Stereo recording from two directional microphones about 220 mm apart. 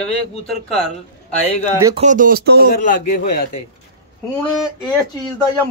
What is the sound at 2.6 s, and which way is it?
Speech, 40° left (ahead or behind).